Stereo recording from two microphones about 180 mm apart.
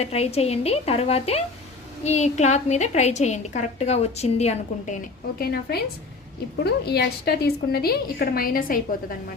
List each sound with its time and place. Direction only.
0.0 s a woman's voice: 35° left (ahead or behind)
5.4 s a woman's voice: 60° left (ahead or behind)